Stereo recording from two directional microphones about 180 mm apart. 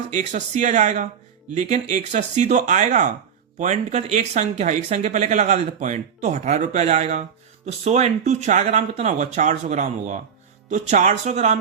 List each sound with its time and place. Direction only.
0.1 s speech: 45° right (ahead or behind)